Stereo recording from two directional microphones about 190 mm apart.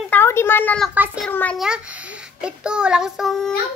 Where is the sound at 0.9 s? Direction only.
10° right (ahead or behind).